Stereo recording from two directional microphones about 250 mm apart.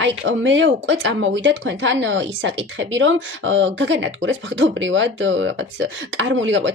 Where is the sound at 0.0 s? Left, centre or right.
Right.